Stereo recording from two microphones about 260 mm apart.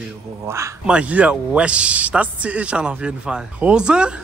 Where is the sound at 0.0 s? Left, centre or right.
Centre.